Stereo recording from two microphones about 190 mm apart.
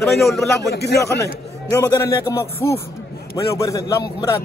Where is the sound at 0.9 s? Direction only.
15° left (ahead or behind).